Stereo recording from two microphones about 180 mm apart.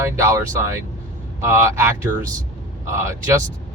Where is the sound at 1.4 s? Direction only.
15° right (ahead or behind).